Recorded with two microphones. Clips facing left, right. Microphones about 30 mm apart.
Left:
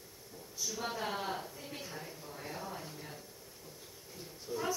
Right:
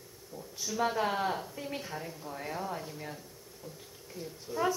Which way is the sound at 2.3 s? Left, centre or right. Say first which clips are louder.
Right 7 dB; right.